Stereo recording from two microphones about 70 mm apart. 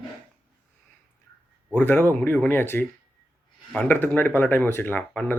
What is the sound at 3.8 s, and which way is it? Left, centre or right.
Speech, left.